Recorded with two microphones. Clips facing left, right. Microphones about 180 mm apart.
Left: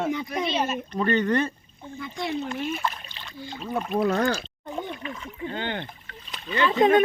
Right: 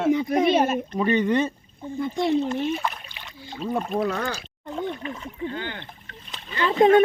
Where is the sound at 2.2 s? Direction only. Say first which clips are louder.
Right 5 dB; 40° right (ahead or behind).